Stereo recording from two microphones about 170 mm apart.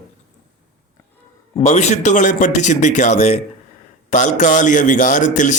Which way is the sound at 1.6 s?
40° left (ahead or behind).